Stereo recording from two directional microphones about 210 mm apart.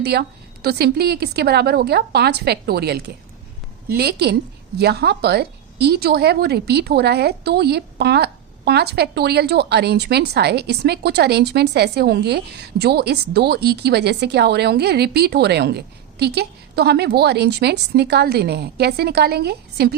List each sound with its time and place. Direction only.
0.0 s a woman's voice: 50° right (ahead or behind)